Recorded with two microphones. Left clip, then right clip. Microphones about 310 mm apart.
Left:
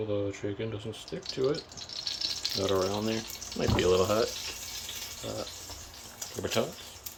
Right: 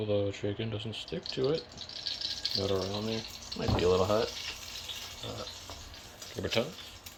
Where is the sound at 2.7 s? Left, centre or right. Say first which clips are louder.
Left 4 dB; centre.